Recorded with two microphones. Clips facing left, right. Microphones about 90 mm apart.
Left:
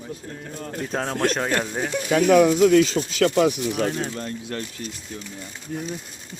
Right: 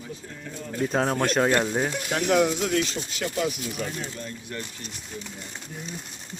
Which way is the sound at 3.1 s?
80° left.